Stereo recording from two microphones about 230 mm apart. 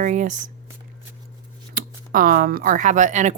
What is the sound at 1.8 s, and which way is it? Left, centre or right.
Speech, right.